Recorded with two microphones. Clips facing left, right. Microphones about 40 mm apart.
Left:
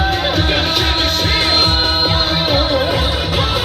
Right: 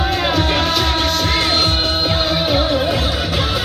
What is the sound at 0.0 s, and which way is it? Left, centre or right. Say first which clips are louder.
Music: left 1 dB; left.